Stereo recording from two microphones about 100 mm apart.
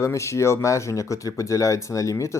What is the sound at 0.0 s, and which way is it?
A man's voice, 30° left (ahead or behind).